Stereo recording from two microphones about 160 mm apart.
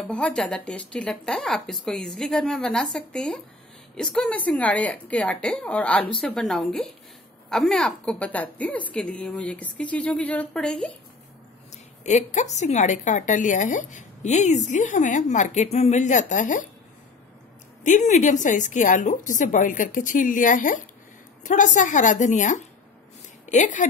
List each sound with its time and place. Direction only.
0.1 s a woman's voice: 5° left (ahead or behind)
12.0 s a woman's voice: 45° left (ahead or behind)
17.8 s a woman's voice: 50° left (ahead or behind)